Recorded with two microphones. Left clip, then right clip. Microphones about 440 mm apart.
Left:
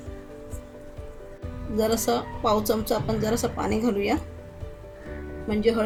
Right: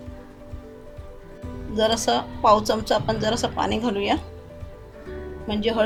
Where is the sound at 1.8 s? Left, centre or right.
Centre.